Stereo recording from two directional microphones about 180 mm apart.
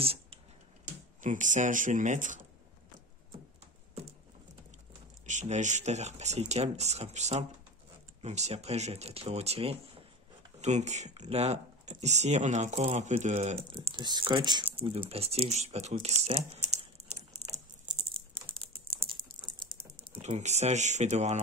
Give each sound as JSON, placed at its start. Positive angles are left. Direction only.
{"t": 1.2, "sound": "speech", "side_deg": -45}
{"t": 5.2, "sound": "speech", "side_deg": -40}
{"t": 20.1, "sound": "speech", "side_deg": -40}